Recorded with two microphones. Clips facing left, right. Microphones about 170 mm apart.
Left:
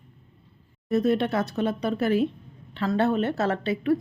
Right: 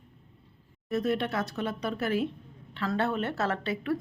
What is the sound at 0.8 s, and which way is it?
Speech, 25° left (ahead or behind).